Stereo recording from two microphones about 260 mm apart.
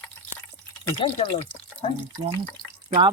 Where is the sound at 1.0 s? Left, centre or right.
Left.